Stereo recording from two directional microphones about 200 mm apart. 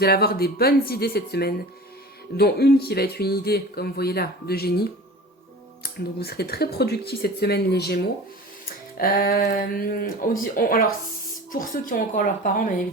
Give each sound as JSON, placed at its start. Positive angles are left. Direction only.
{"t": 0.0, "sound": "speech", "side_deg": 50}